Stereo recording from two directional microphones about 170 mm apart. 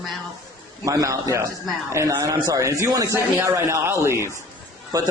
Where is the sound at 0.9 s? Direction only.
20° right (ahead or behind).